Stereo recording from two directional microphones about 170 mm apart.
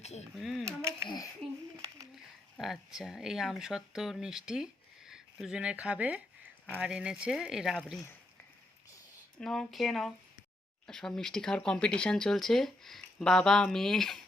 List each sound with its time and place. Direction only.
0.0 s speech: 40° left (ahead or behind)
0.3 s speech: centre (ahead or behind)
1.0 s speech: 25° left (ahead or behind)
2.6 s speech: centre (ahead or behind)
9.4 s speech: centre (ahead or behind)